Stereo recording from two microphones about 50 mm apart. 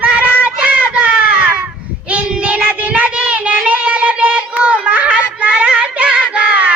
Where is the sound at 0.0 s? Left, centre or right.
Right.